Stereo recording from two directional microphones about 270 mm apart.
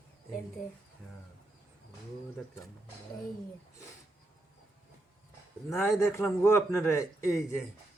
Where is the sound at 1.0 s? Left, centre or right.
Centre.